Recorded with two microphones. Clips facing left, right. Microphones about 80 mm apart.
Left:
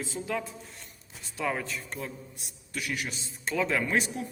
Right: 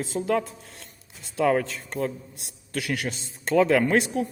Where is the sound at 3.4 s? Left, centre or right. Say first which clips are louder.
Right 9 dB; right.